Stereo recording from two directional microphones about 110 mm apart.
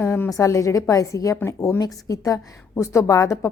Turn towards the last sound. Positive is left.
turn(degrees=30)  # may be behind; listen again after turning